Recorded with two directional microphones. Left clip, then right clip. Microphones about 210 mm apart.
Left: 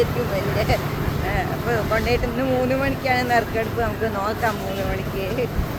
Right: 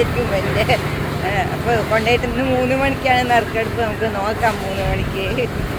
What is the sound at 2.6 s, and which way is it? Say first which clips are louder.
Speech: right 5 dB; 5° right (ahead or behind).